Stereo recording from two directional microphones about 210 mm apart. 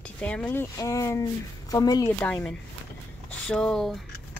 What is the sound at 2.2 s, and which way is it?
Speech, 5° left (ahead or behind).